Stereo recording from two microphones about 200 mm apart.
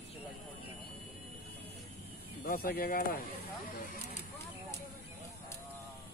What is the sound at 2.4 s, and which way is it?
Speech, 50° left (ahead or behind).